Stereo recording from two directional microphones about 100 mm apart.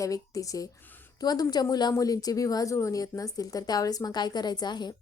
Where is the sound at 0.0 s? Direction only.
35° left (ahead or behind).